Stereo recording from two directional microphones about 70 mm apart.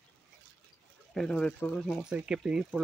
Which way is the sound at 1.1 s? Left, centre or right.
Centre.